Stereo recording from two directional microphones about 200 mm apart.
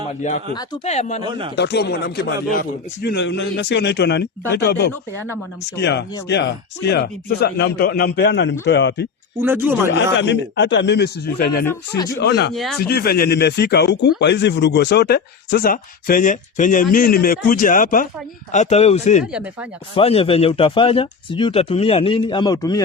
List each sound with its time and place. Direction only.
0.2 s speech: 35° left (ahead or behind)
1.2 s speech: 25° right (ahead or behind)
1.5 s a man's voice: 55° left (ahead or behind)
9.4 s speech: 10° right (ahead or behind)
9.9 s a man's voice: 60° left (ahead or behind); by 22.8 s 20° left (ahead or behind)